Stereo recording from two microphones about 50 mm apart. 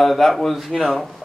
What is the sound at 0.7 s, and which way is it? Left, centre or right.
Speech, centre.